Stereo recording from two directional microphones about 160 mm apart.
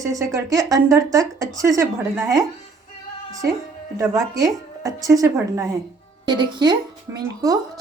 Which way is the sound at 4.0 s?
20° right (ahead or behind).